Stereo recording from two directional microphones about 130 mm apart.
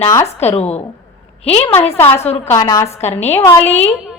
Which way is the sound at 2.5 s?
20° left (ahead or behind).